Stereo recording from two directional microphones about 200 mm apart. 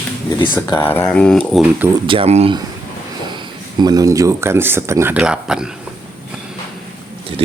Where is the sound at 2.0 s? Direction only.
25° right (ahead or behind).